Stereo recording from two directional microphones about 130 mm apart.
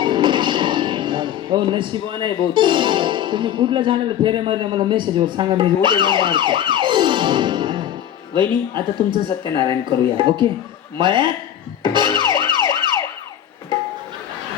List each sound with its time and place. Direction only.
0.0 s speech: 35° right (ahead or behind)
11.8 s music: 35° right (ahead or behind)